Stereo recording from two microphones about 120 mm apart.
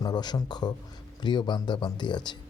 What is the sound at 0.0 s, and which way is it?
A man's voice, 35° left (ahead or behind).